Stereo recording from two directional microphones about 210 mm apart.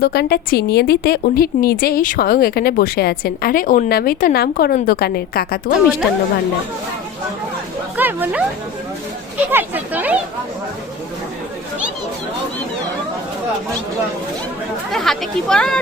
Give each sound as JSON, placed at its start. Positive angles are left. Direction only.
{"t": 0.0, "sound": "a woman's voice", "side_deg": 50}
{"t": 7.9, "sound": "music", "side_deg": -10}
{"t": 9.5, "sound": "speech", "side_deg": -10}
{"t": 14.9, "sound": "speech", "side_deg": 0}